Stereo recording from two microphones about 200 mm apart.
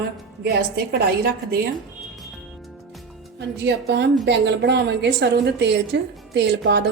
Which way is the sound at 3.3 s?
60° right (ahead or behind).